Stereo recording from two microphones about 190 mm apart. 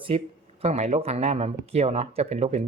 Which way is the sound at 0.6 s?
35° right (ahead or behind).